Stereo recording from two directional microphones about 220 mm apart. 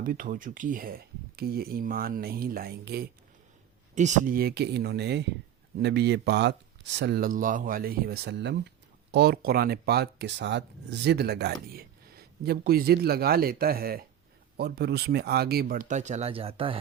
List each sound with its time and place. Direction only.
0.0 s speech: 40° right (ahead or behind)
3.9 s a man's voice: 35° right (ahead or behind)